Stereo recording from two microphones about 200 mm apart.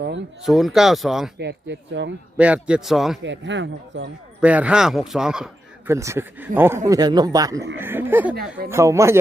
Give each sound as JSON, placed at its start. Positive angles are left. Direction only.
{"t": 0.4, "sound": "speech", "side_deg": 0}
{"t": 1.4, "sound": "speech", "side_deg": -60}
{"t": 2.4, "sound": "speech", "side_deg": -5}
{"t": 3.2, "sound": "speech", "side_deg": -65}
{"t": 4.4, "sound": "speech", "side_deg": -5}
{"t": 5.9, "sound": "speech", "side_deg": -15}